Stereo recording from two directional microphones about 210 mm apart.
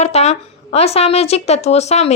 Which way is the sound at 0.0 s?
30° left (ahead or behind).